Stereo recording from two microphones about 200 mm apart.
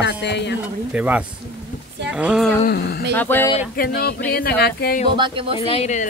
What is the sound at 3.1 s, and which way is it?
Speech, 10° left (ahead or behind).